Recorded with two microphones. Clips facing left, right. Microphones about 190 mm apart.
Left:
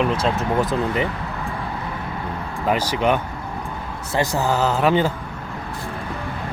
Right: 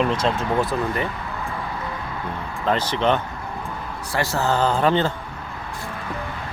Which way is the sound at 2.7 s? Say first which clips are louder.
Left 1 dB; 10° left (ahead or behind).